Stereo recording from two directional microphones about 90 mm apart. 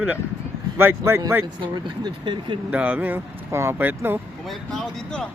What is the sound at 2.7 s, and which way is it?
Speech, 20° right (ahead or behind).